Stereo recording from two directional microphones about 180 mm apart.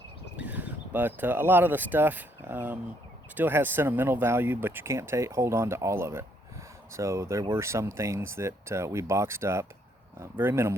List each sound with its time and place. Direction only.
0.3 s speech: 10° right (ahead or behind)